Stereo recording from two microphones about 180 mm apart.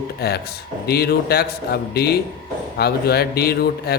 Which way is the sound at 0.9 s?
60° left (ahead or behind).